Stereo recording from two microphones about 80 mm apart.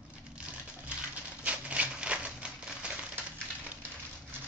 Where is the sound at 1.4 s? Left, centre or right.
Centre.